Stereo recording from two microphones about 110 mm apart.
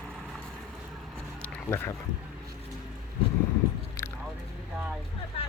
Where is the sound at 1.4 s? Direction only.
20° left (ahead or behind).